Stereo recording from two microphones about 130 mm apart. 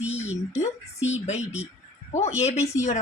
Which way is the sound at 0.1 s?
60° left (ahead or behind).